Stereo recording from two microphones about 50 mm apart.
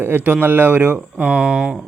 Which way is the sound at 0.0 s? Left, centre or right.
Right.